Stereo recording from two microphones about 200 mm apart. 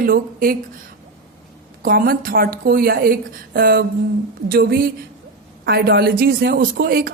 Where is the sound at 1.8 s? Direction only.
45° right (ahead or behind).